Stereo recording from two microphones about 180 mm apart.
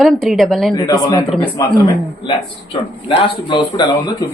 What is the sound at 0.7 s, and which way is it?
Speech, 20° left (ahead or behind).